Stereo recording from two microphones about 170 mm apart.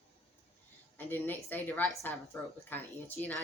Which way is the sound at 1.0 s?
10° left (ahead or behind).